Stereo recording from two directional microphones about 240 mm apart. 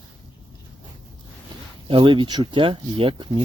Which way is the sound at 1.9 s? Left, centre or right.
Right.